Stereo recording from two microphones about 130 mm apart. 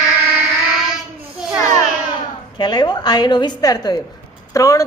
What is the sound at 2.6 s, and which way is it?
A woman's voice, 35° left (ahead or behind).